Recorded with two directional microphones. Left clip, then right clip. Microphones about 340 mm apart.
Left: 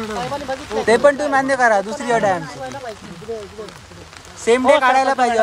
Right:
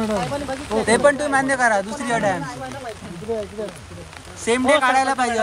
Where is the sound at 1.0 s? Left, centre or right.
Centre.